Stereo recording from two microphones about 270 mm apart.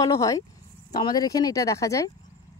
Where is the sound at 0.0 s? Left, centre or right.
Centre.